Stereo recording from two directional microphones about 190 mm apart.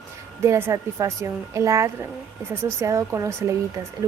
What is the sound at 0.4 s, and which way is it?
Speech, 15° right (ahead or behind).